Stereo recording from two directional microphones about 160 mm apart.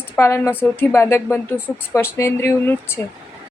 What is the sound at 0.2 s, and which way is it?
A woman's voice, 15° left (ahead or behind).